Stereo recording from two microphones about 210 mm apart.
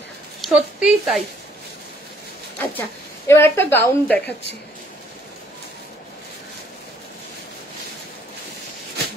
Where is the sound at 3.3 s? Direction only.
10° left (ahead or behind).